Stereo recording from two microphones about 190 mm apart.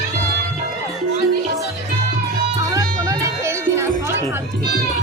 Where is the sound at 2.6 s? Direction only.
15° right (ahead or behind).